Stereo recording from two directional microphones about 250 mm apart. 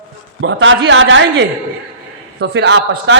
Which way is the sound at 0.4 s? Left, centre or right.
Right.